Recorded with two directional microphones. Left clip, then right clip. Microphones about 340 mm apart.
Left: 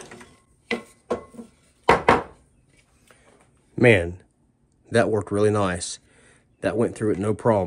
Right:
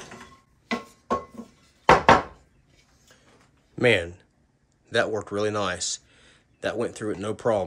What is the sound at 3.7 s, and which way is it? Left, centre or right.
Speech, centre.